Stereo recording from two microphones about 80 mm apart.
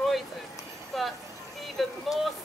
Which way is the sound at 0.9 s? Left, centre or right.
Centre.